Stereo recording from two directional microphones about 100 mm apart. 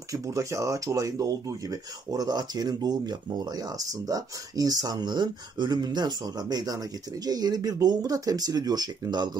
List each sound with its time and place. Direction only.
0.1 s speech: 30° right (ahead or behind)